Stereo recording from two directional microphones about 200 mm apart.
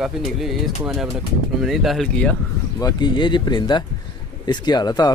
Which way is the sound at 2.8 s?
20° left (ahead or behind).